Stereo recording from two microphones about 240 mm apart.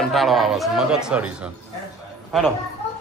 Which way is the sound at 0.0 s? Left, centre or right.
Centre.